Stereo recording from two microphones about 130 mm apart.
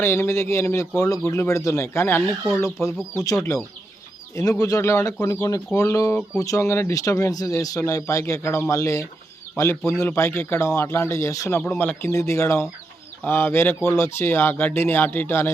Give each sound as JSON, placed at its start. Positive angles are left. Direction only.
{"t": 0.0, "sound": "a man's voice", "side_deg": 20}
{"t": 4.6, "sound": "a man's voice", "side_deg": 25}
{"t": 11.6, "sound": "a man's voice", "side_deg": 10}